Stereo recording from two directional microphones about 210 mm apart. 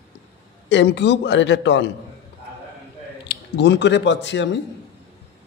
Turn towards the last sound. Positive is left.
turn(degrees=60)  # may be behind; listen again after turning